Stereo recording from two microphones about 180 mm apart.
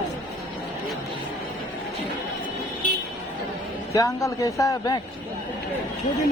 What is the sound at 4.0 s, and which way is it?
A man's voice, 20° left (ahead or behind).